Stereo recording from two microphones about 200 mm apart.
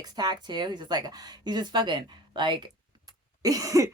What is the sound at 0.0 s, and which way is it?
Speech, 20° right (ahead or behind).